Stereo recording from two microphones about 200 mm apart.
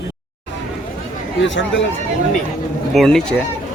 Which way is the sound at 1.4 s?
65° left (ahead or behind).